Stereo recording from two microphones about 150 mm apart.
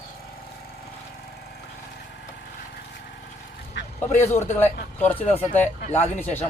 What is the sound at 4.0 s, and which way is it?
A man's voice, 15° left (ahead or behind).